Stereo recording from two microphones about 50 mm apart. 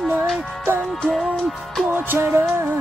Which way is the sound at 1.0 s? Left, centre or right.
Centre.